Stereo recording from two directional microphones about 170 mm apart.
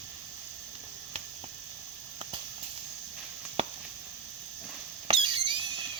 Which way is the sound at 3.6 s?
35° right (ahead or behind).